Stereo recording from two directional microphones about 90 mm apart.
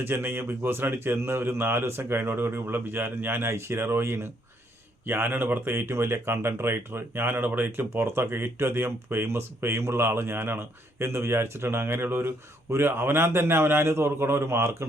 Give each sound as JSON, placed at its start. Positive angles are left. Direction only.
{"t": 0.0, "sound": "speech", "side_deg": -25}